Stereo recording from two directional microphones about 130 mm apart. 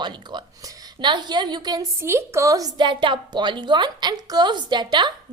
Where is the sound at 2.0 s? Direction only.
20° right (ahead or behind); by 5.1 s 35° right (ahead or behind).